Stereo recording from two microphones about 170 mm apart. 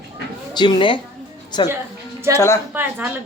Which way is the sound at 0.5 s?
25° left (ahead or behind).